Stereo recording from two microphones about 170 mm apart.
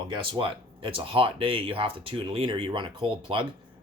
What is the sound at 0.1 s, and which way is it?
Speech, 30° right (ahead or behind).